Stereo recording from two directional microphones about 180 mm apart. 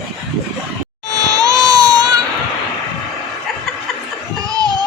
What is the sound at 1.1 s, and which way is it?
Baby cry, 20° right (ahead or behind).